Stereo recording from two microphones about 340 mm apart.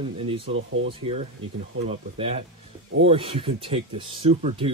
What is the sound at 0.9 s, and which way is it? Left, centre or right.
Speech, centre.